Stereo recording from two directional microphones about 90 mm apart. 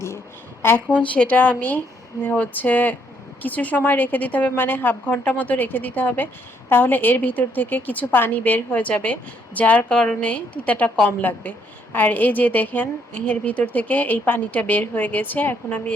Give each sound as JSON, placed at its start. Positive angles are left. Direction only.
{"t": 0.6, "sound": "a woman's voice", "side_deg": 25}